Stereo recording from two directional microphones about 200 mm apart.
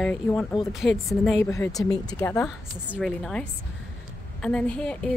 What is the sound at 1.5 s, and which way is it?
Speech, 15° left (ahead or behind).